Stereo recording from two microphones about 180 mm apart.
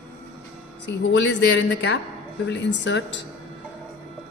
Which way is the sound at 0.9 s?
85° left.